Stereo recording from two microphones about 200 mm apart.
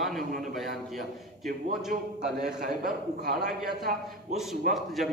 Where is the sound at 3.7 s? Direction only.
50° right (ahead or behind).